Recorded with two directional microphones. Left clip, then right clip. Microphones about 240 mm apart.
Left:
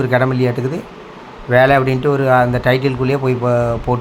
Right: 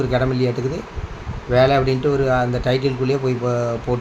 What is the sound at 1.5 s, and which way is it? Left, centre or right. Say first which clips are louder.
A man's voice: left 4 dB; centre.